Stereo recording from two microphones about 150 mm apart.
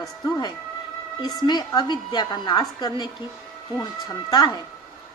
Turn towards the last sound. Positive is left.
turn(degrees=25)  # may be behind; listen again after turning